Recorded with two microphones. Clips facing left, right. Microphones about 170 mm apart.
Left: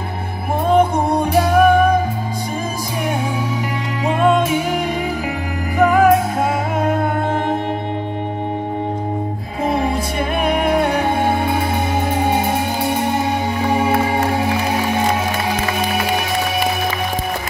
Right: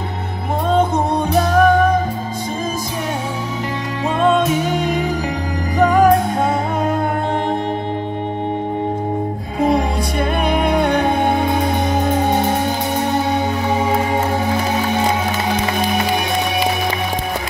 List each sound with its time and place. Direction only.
0.7 s music: 10° left (ahead or behind)
4.2 s music: 10° left (ahead or behind)
9.6 s music: 5° left (ahead or behind)
13.7 s music: 10° left (ahead or behind)